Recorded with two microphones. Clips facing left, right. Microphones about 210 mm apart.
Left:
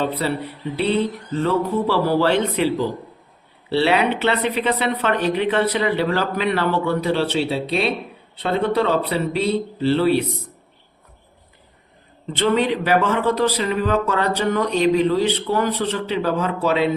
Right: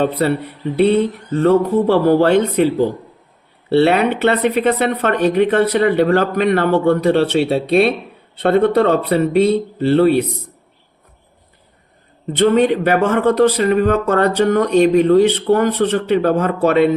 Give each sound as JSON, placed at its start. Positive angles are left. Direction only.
{"t": 0.0, "sound": "speech", "side_deg": -55}
{"t": 12.4, "sound": "speech", "side_deg": -45}